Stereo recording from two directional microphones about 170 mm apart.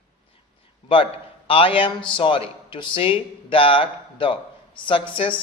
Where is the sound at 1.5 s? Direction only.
30° left (ahead or behind).